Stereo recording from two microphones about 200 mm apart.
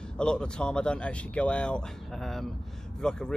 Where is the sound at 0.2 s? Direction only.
5° left (ahead or behind).